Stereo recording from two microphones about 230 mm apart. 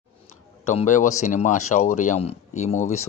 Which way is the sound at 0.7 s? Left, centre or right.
Left.